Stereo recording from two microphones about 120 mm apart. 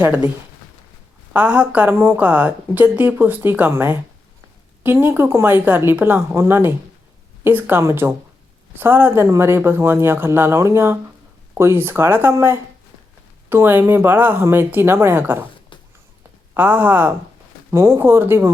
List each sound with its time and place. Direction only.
0.0 s speech: 15° right (ahead or behind)
1.3 s speech: 10° right (ahead or behind)
16.6 s speech: 15° right (ahead or behind)